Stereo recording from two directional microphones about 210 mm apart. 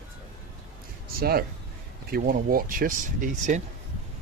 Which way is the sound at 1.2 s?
45° right (ahead or behind).